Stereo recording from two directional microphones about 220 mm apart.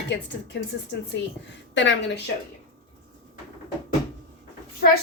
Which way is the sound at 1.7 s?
55° left (ahead or behind).